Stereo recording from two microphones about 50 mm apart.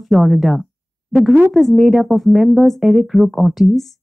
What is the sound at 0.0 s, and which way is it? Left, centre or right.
Speech, centre.